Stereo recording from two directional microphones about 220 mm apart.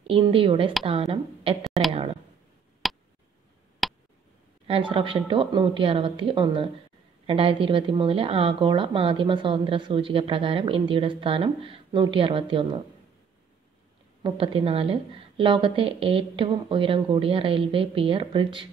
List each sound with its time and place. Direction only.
0.0 s a woman's voice: 25° right (ahead or behind)
1.6 s speech: centre (ahead or behind)
2.8 s a sound: centre (ahead or behind)
4.6 s a woman's voice: 25° right (ahead or behind)
14.2 s a woman's voice: 25° right (ahead or behind)